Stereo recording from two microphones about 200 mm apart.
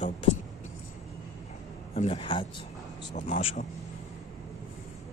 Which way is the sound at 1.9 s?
30° left (ahead or behind).